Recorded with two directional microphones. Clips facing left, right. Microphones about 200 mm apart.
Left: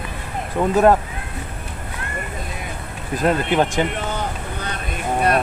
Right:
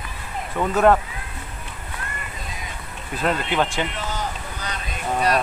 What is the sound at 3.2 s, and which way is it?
Vehicle, 45° left (ahead or behind).